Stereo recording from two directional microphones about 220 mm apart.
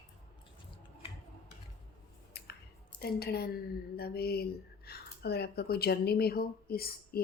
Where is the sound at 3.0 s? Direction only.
45° left (ahead or behind).